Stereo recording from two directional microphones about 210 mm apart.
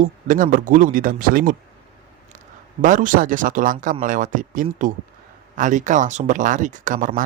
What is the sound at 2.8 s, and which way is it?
Speech, 40° right (ahead or behind).